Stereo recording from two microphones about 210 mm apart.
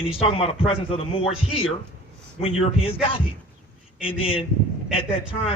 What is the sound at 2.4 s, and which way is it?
A man's voice, 30° left (ahead or behind).